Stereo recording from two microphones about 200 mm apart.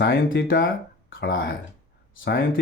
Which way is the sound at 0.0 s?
55° left (ahead or behind).